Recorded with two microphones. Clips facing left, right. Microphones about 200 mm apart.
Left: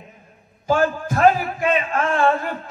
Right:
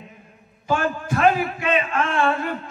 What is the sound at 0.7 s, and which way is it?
A man's voice, 40° left (ahead or behind).